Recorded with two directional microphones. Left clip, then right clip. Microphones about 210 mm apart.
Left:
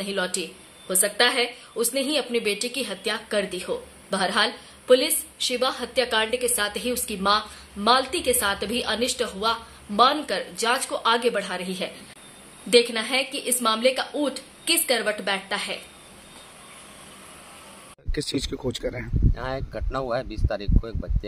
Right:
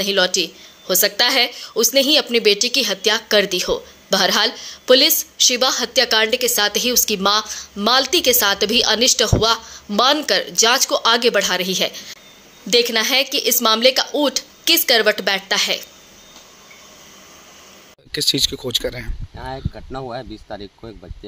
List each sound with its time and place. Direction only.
0.0 s a woman's voice: 40° right (ahead or behind)
18.1 s speech: centre (ahead or behind)
19.3 s speech: 20° left (ahead or behind)